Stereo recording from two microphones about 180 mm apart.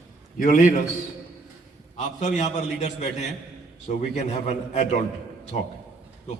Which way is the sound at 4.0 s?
40° left (ahead or behind).